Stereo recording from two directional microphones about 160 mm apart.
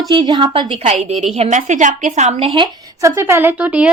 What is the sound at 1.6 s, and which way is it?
Speech, 50° right (ahead or behind).